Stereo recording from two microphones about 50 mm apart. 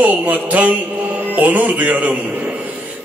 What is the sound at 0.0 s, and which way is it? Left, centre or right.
A man's voice, right.